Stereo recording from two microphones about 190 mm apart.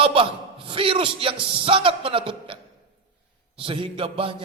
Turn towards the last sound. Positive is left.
turn(degrees=-30)  # may be behind; listen again after turning